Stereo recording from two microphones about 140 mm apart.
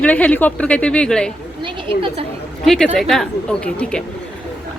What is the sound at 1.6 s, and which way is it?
Speech, 35° right (ahead or behind).